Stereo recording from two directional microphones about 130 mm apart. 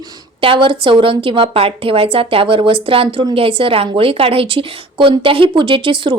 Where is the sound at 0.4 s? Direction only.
40° right (ahead or behind).